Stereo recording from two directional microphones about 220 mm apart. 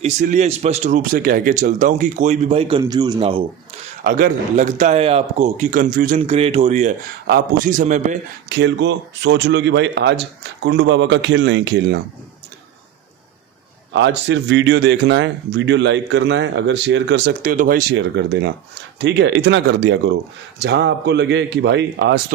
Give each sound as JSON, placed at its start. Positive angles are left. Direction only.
{"t": 0.0, "sound": "speech", "side_deg": -35}
{"t": 4.0, "sound": "speech", "side_deg": -35}
{"t": 6.1, "sound": "speech", "side_deg": -30}
{"t": 8.4, "sound": "speech", "side_deg": -55}
{"t": 13.9, "sound": "speech", "side_deg": -55}
{"t": 17.9, "sound": "speech", "side_deg": -55}